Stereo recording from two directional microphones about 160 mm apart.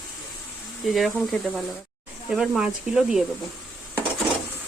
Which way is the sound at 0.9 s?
Centre (ahead or behind).